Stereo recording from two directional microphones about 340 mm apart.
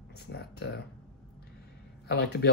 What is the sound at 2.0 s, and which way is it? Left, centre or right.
Speech, left.